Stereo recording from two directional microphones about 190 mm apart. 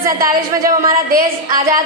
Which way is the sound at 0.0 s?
15° right (ahead or behind).